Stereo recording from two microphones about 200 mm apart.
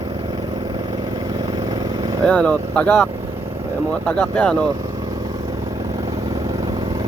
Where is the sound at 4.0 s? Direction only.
5° left (ahead or behind).